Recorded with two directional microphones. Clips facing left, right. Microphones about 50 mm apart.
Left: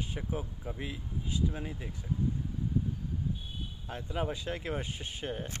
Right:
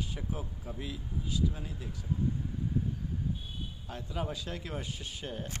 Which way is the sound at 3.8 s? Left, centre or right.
Left.